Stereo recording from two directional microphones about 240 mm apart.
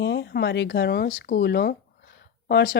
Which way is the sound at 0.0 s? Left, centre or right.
Left.